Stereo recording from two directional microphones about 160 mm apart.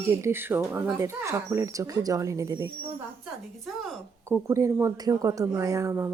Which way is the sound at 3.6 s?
Centre (ahead or behind).